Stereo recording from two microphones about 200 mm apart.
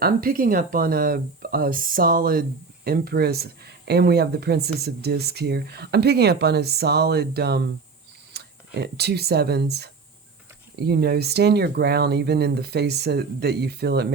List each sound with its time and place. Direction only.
0.0 s speech: 45° right (ahead or behind)